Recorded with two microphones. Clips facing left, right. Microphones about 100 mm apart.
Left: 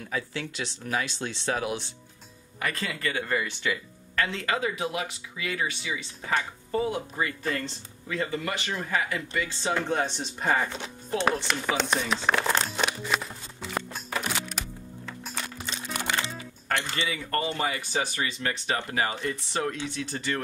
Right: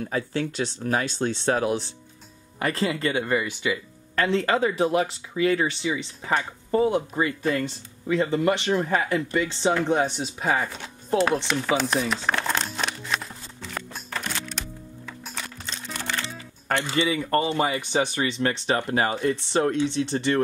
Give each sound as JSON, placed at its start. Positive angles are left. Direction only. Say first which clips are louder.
{"t": 0.0, "sound": "speech", "louder": "right 6 dB", "side_deg": -40}
{"t": 4.1, "sound": "speech", "louder": "right 6 dB", "side_deg": -30}
{"t": 10.1, "sound": "speech", "louder": "right 2 dB", "side_deg": -5}
{"t": 11.4, "sound": "music", "louder": "right 4 dB", "side_deg": 0}
{"t": 16.6, "sound": "speech", "louder": "right 6 dB", "side_deg": -25}